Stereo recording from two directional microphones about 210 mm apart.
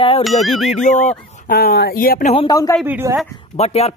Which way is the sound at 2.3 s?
20° left (ahead or behind).